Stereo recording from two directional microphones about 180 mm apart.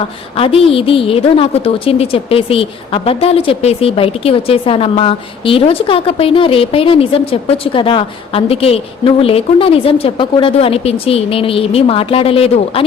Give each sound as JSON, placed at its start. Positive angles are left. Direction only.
{"t": 0.3, "sound": "a woman's voice", "side_deg": 30}